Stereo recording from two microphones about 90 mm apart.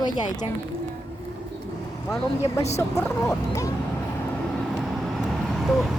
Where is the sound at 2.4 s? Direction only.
35° left (ahead or behind).